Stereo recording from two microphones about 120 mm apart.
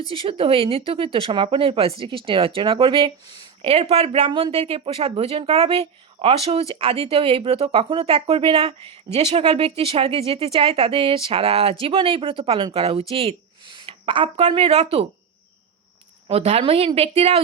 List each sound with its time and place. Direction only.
0.1 s speech: 50° right (ahead or behind)
4.3 s speech: 45° right (ahead or behind)
14.3 s a woman's voice: 60° right (ahead or behind)
16.2 s a woman's voice: 60° right (ahead or behind)